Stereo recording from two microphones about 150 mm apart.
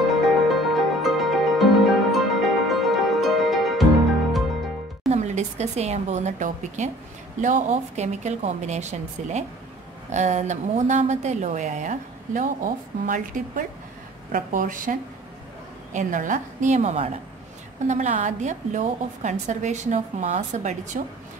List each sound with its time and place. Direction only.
0.1 s music: centre (ahead or behind)
5.1 s a woman's voice: 50° right (ahead or behind)